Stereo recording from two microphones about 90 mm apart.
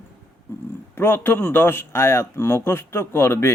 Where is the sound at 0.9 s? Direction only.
25° left (ahead or behind).